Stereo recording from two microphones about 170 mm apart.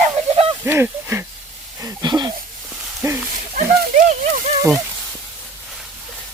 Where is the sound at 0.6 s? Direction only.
15° right (ahead or behind).